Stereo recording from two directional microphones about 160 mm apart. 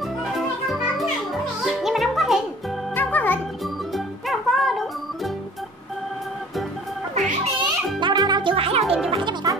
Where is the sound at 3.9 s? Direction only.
Centre (ahead or behind).